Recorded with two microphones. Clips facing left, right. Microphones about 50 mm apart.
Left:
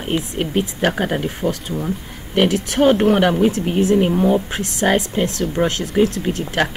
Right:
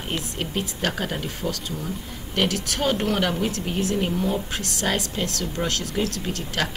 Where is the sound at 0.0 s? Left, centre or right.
Left.